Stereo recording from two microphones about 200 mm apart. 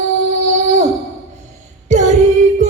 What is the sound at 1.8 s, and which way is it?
Female singing, 35° right (ahead or behind).